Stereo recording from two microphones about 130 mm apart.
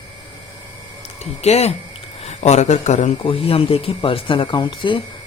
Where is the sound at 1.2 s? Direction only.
55° left (ahead or behind).